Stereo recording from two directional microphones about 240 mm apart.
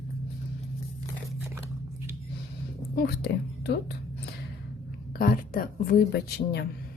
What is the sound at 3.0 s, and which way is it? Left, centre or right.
Speech, left.